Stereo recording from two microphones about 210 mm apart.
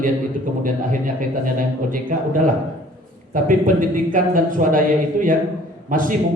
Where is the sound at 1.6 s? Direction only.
40° right (ahead or behind).